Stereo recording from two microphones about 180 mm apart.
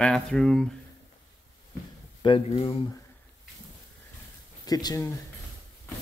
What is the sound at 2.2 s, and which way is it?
Speech, 30° left (ahead or behind).